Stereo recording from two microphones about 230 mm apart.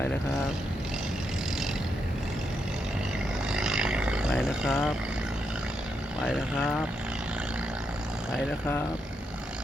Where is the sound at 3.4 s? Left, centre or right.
Centre.